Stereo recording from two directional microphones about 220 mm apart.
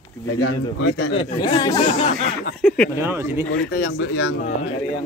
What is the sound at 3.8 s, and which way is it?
Speech, 55° left (ahead or behind).